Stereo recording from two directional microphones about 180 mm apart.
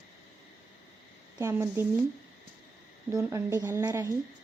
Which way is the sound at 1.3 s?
15° right (ahead or behind).